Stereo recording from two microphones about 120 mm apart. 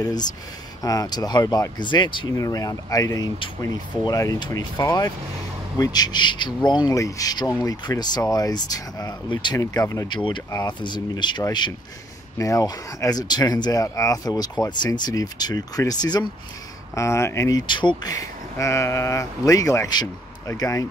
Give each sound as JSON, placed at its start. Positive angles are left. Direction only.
{"t": 0.0, "sound": "speech", "side_deg": 35}
{"t": 2.3, "sound": "speech", "side_deg": 30}
{"t": 18.1, "sound": "speech", "side_deg": 25}